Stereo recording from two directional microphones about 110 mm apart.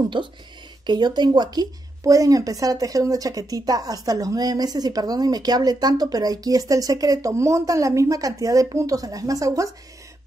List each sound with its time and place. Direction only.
0.2 s a woman's voice: 45° right (ahead or behind)